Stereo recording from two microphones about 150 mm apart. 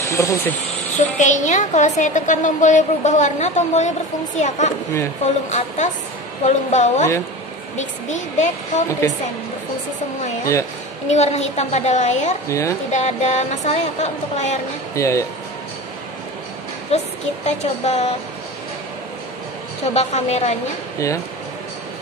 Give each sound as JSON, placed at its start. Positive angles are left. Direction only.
{"t": 0.0, "sound": "speech", "side_deg": 20}
{"t": 0.9, "sound": "a woman's voice", "side_deg": 50}
{"t": 11.1, "sound": "a woman's voice", "side_deg": 50}
{"t": 12.4, "sound": "speech", "side_deg": 20}
{"t": 12.9, "sound": "a woman's voice", "side_deg": 50}
{"t": 15.0, "sound": "speech", "side_deg": 20}
{"t": 16.9, "sound": "a woman's voice", "side_deg": 45}
{"t": 19.9, "sound": "a woman's voice", "side_deg": 45}